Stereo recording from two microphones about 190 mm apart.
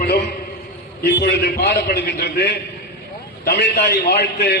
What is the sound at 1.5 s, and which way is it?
Speech, 55° left (ahead or behind).